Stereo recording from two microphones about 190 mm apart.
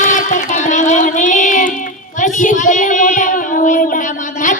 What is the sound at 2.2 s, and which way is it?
Child singing, 40° left (ahead or behind).